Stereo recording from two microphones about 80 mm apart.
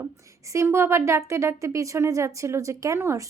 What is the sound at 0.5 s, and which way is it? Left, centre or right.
A woman's voice, right.